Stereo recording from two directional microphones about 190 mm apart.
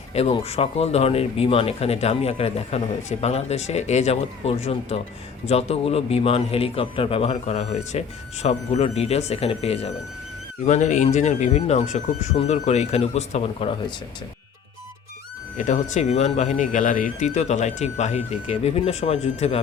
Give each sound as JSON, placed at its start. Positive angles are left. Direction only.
{"t": 0.1, "sound": "speech", "side_deg": 35}
{"t": 15.5, "sound": "speech", "side_deg": 40}